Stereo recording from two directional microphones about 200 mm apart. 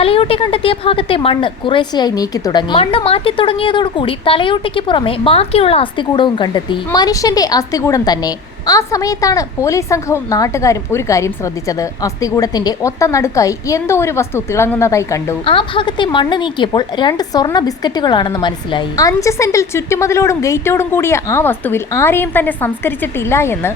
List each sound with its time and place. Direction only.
0.0 s a woman's voice: 30° left (ahead or behind)
15.4 s a woman's voice: 25° left (ahead or behind)